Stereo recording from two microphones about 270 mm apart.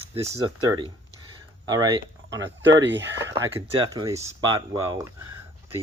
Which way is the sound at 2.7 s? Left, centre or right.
Right.